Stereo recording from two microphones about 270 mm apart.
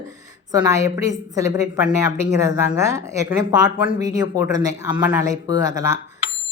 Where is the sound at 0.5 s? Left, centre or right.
Centre.